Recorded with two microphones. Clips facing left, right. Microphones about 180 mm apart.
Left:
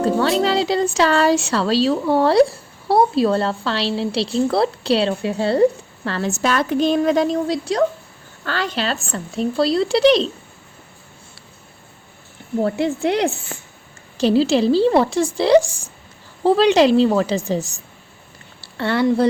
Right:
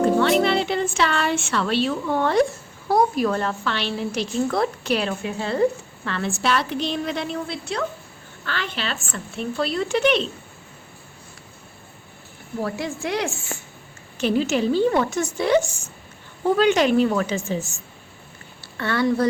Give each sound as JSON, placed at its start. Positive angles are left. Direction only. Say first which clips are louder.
{"t": 0.0, "sound": "music", "louder": "even", "side_deg": 35}
{"t": 0.7, "sound": "speech", "louder": "left 5 dB", "side_deg": 40}
{"t": 12.6, "sound": "speech", "louder": "left 8 dB", "side_deg": 30}